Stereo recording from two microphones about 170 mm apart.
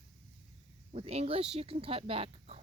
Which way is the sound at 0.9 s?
35° right (ahead or behind).